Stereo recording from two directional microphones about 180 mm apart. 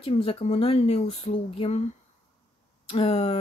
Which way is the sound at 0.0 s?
35° left (ahead or behind).